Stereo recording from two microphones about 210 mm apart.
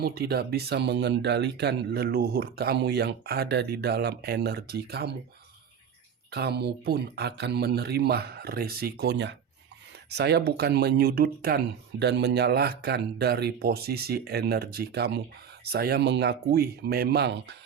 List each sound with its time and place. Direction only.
0.0 s speech: 45° right (ahead or behind)
6.3 s speech: 50° right (ahead or behind)